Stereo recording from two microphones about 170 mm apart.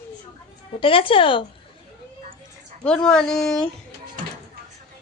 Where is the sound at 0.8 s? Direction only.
30° left (ahead or behind).